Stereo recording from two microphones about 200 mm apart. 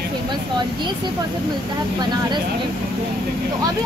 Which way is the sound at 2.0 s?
20° right (ahead or behind).